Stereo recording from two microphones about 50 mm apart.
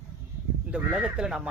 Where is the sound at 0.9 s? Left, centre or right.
Centre.